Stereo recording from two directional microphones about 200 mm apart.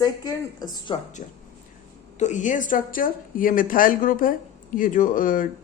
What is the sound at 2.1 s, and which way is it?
A woman's voice, 35° left (ahead or behind).